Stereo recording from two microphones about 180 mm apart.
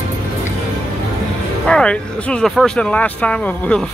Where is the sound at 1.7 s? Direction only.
5° left (ahead or behind).